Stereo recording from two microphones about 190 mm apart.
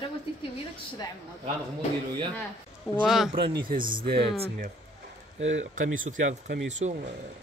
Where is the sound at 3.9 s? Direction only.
55° right (ahead or behind).